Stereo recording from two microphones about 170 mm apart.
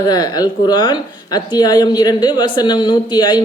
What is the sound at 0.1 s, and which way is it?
Speech, 25° left (ahead or behind).